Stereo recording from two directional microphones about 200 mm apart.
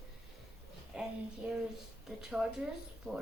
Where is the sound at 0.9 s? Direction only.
5° right (ahead or behind).